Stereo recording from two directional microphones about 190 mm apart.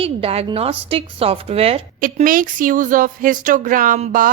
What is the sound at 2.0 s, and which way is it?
Speech, 45° right (ahead or behind).